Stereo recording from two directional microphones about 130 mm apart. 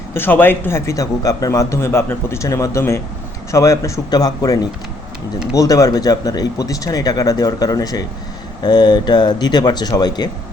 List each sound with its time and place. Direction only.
0.1 s a man's voice: 15° left (ahead or behind); by 10.2 s 30° left (ahead or behind)